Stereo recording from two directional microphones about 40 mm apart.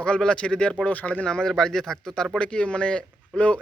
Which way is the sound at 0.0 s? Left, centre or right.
Left.